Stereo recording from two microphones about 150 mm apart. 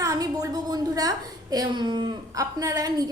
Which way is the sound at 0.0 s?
25° right (ahead or behind).